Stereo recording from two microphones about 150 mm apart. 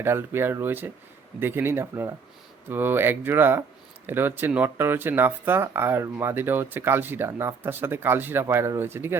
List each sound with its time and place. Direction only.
0.0 s speech: 15° right (ahead or behind)